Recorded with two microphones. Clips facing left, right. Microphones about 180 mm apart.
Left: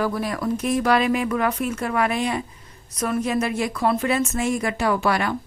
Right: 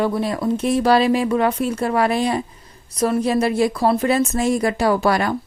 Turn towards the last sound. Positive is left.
turn(degrees=-40)  # may be behind; listen again after turning